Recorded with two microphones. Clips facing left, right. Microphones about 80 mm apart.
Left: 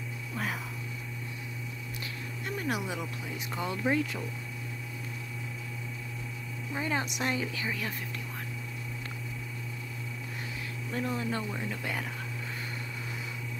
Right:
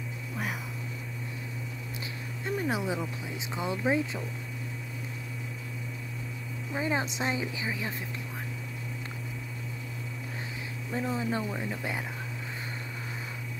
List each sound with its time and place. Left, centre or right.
2.4 s a sound: right
3.5 s speech: centre
6.7 s speech: centre
10.9 s speech: centre